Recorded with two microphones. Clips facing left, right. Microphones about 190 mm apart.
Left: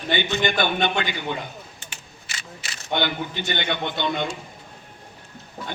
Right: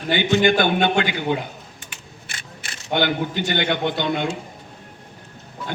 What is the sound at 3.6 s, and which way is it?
Speech, 50° right (ahead or behind).